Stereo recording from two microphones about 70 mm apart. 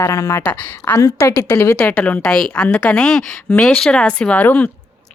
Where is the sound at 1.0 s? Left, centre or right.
Left.